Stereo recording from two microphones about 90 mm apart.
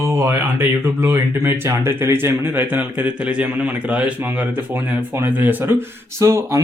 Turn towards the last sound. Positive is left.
turn(degrees=-35)  # may be behind; listen again after turning